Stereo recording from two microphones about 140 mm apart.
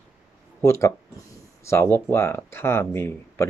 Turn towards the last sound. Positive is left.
turn(degrees=15)  # may be behind; listen again after turning